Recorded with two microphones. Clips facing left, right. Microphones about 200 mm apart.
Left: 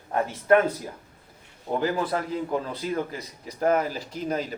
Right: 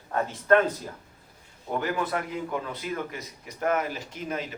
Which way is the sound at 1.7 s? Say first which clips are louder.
Left 3 dB; 30° left (ahead or behind).